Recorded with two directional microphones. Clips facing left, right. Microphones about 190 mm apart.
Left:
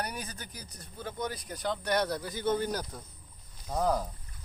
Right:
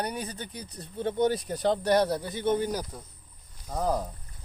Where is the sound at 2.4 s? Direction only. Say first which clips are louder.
Right 2 dB; 15° right (ahead or behind).